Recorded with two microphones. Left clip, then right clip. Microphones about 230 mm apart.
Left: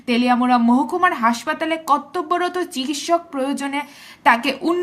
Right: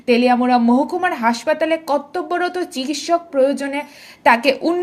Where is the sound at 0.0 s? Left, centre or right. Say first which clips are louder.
Right 3 dB; centre.